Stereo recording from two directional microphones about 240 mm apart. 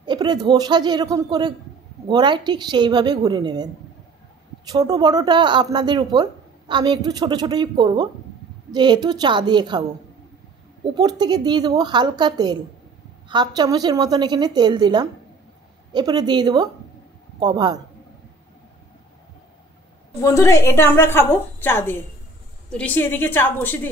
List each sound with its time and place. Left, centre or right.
0.0 s a woman's voice: centre
20.2 s a woman's voice: centre